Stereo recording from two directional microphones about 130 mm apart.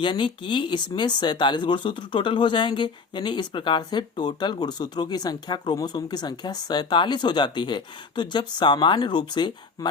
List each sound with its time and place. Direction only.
0.0 s speech: 35° left (ahead or behind)